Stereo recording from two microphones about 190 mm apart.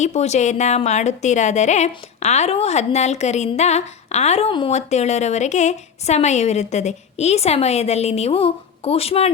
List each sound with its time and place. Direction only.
0.0 s a woman's voice: 35° left (ahead or behind)